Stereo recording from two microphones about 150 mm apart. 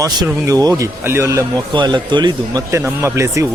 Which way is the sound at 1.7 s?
30° right (ahead or behind).